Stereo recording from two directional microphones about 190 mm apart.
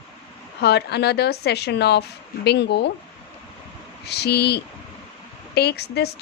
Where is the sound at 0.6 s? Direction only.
60° left (ahead or behind).